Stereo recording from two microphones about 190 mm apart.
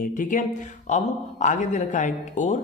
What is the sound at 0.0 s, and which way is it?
A man's voice, 45° left (ahead or behind).